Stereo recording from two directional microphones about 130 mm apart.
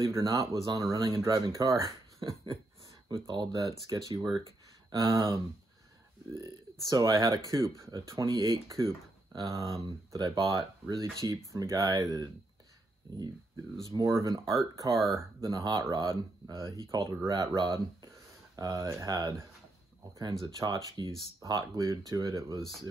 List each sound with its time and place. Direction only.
0.0 s speech: 25° right (ahead or behind)
13.9 s speech: 25° right (ahead or behind)
20.5 s speech: 25° right (ahead or behind)
22.6 s speech: centre (ahead or behind)